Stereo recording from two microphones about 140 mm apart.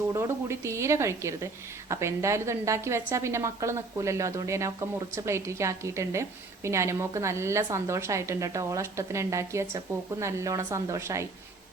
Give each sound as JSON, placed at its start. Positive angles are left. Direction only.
{"t": 0.1, "sound": "a woman's voice", "side_deg": -20}